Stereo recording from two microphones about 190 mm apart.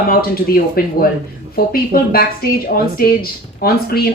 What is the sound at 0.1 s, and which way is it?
Speech, 50° left (ahead or behind).